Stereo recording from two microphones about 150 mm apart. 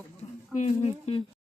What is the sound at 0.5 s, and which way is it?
Speech, 50° left (ahead or behind).